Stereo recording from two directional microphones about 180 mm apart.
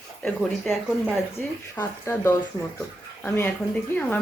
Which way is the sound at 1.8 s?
10° left (ahead or behind).